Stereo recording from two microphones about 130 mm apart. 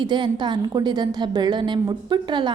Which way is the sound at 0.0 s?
35° right (ahead or behind).